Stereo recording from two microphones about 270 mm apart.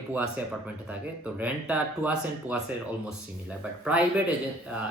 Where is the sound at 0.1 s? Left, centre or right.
Centre.